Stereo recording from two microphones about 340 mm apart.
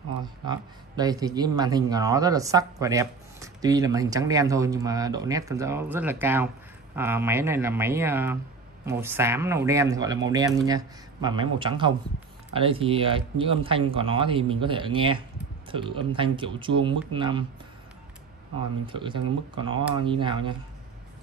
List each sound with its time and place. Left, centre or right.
0.2 s speech: centre
18.9 s speech: centre